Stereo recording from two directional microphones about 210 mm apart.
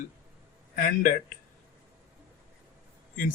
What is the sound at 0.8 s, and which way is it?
Speech, 40° left (ahead or behind).